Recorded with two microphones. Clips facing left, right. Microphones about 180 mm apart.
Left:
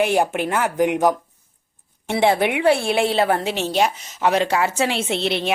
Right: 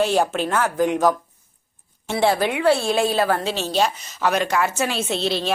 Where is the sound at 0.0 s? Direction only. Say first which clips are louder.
Left 1 dB; 15° left (ahead or behind).